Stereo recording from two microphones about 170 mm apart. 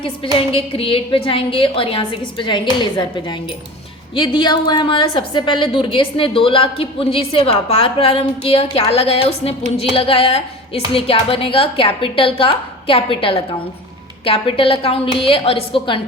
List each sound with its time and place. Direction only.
0.5 s a woman's voice: 30° left (ahead or behind)
4.1 s a woman's voice: 30° left (ahead or behind)